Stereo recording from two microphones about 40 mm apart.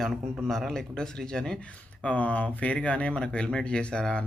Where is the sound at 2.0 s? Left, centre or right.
Left.